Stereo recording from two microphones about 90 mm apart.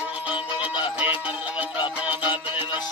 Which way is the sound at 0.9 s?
20° right (ahead or behind).